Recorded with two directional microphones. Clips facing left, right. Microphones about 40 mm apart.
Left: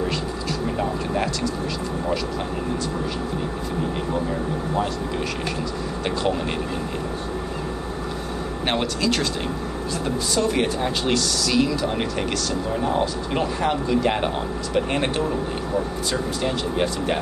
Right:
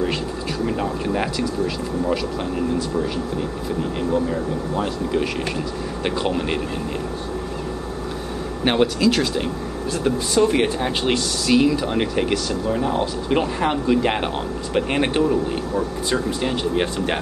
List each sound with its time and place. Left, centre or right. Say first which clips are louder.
0.7 s speech: right 1 dB; centre
4.7 s speech: right 4 dB; centre
8.6 s speech: right 5 dB; centre
10.0 s speech: right 5 dB; centre